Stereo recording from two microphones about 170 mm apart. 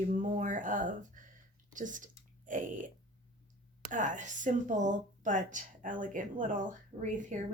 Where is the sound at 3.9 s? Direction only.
50° right (ahead or behind).